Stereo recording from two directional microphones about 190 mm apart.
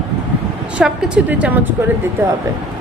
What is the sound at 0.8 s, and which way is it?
Speech, 5° right (ahead or behind).